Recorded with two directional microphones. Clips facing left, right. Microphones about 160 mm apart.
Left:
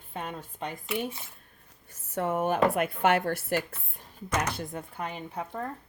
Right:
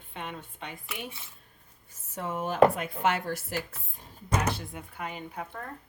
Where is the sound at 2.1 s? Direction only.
60° left (ahead or behind).